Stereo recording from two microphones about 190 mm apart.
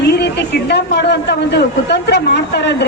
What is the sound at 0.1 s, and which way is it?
A man's voice, 60° left (ahead or behind).